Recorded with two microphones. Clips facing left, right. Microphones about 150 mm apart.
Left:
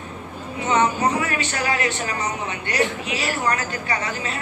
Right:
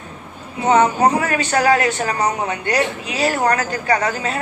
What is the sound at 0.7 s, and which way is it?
Speech, 40° right (ahead or behind).